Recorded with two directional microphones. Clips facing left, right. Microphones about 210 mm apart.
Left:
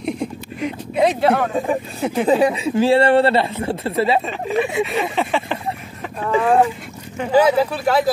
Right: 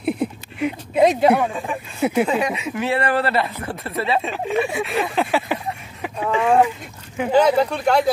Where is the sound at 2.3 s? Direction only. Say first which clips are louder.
Left 6 dB; 30° left (ahead or behind).